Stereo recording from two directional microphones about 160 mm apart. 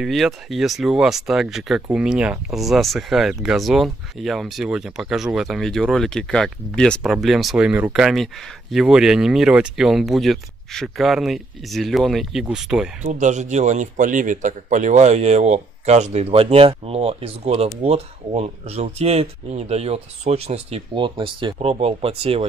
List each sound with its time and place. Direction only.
0.0 s speech: centre (ahead or behind)
13.0 s speech: 50° right (ahead or behind)